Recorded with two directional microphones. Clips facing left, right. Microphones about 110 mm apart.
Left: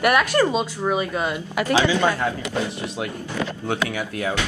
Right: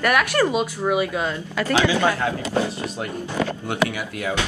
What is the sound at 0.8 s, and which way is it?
Speech, 10° right (ahead or behind).